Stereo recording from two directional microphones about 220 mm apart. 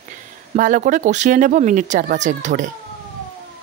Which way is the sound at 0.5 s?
35° right (ahead or behind).